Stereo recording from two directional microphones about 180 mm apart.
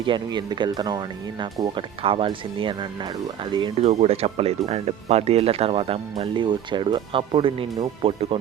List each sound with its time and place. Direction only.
0.0 s speech: 25° right (ahead or behind)